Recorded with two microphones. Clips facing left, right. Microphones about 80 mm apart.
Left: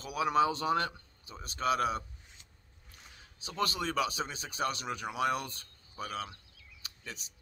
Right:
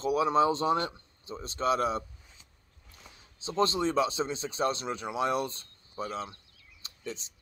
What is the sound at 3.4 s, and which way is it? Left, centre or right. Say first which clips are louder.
Speech: right 6 dB; right.